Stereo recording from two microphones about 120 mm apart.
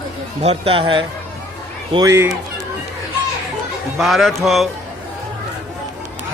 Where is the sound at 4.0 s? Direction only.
Centre (ahead or behind).